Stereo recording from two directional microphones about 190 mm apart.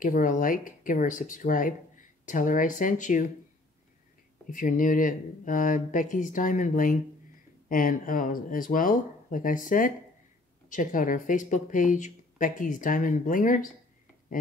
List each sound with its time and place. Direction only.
0.0 s speech: 45° left (ahead or behind)
4.5 s speech: 45° left (ahead or behind)